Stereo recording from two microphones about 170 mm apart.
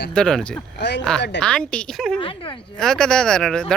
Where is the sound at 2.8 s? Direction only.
5° left (ahead or behind).